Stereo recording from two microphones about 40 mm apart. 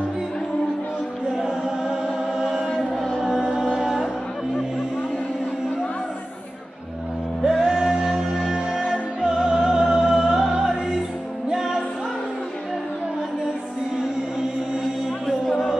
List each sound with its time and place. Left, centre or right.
1.3 s chant: centre
3.3 s music: centre
7.4 s music: centre
8.0 s music: centre
8.5 s music: centre
9.8 s music: right